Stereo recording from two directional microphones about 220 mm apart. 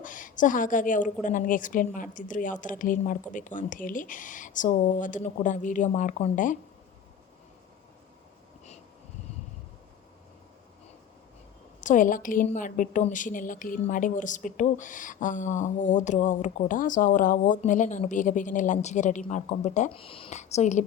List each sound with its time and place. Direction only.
0.0 s a woman's voice: 35° left (ahead or behind)
11.8 s a woman's voice: 35° left (ahead or behind)